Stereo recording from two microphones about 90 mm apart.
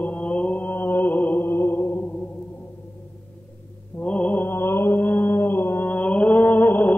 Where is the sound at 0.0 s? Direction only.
10° left (ahead or behind).